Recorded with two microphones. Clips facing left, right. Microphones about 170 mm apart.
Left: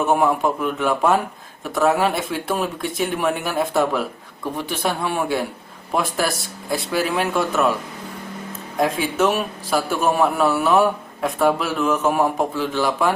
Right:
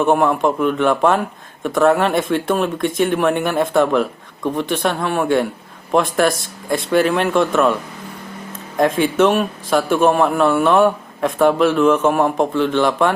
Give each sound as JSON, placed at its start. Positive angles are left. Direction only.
{"t": 0.2, "sound": "a man's voice", "side_deg": 5}
{"t": 8.8, "sound": "a man's voice", "side_deg": 0}